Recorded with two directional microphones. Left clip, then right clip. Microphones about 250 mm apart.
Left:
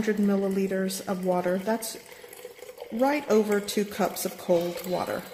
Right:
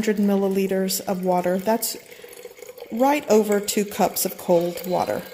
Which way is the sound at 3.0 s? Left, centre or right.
Right.